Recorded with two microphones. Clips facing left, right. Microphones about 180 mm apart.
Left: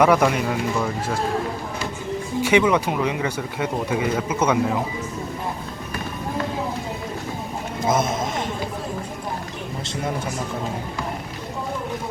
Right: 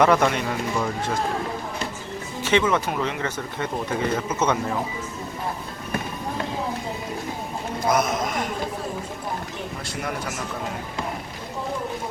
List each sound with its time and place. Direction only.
0.0 s speech: 10° left (ahead or behind)
2.4 s speech: 15° left (ahead or behind)
7.9 s speech: 25° left (ahead or behind)